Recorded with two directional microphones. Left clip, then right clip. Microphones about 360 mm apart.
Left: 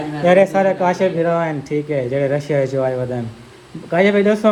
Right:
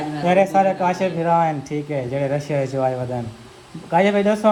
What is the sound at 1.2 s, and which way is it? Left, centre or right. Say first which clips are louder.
Speech: even; centre.